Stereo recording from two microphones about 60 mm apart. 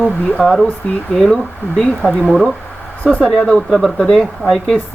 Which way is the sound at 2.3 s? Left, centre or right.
Centre.